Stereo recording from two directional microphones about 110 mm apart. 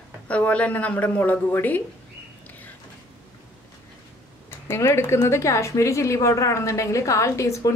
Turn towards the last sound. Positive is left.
turn(degrees=30)  # may be behind; listen again after turning